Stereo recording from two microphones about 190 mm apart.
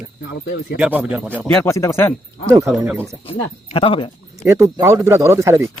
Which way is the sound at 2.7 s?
10° right (ahead or behind).